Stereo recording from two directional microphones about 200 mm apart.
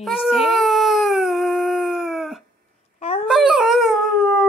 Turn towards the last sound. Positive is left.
turn(degrees=-5)  # may be behind; listen again after turning